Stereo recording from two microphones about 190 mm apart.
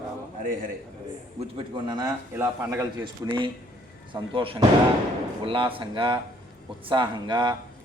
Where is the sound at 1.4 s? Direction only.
25° right (ahead or behind).